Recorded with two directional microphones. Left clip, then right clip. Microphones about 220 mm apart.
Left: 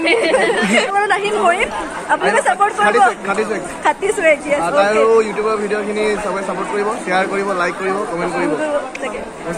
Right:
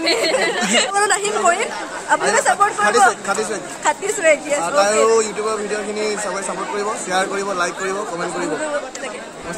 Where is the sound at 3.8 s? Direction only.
5° left (ahead or behind).